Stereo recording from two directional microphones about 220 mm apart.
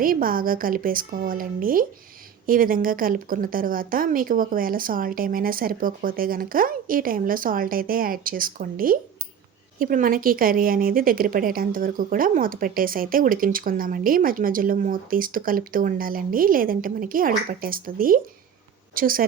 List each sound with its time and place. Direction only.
0.0 s a woman's voice: 40° right (ahead or behind)